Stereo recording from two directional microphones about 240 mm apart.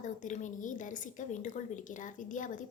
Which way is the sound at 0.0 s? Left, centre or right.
Left.